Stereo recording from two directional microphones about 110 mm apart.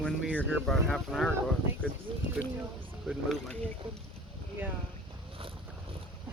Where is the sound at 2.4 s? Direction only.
5° right (ahead or behind).